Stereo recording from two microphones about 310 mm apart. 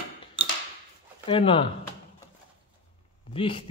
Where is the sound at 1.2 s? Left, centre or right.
Centre.